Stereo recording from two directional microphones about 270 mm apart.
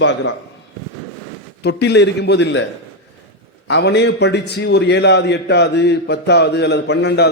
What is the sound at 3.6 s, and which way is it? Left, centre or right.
A man's voice, left.